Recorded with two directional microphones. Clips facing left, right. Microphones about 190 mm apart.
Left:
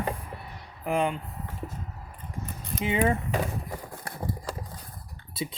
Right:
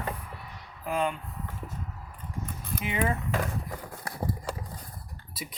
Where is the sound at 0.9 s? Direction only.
20° left (ahead or behind).